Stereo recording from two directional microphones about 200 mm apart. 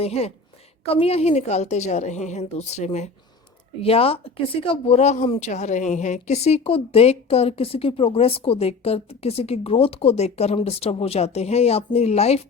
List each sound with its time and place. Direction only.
0.0 s speech: 30° left (ahead or behind)